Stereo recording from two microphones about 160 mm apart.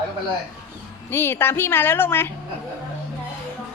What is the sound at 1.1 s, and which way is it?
Speech, 15° left (ahead or behind).